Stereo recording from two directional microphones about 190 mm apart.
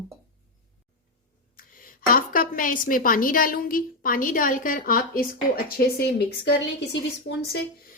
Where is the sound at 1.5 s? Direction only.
50° left (ahead or behind).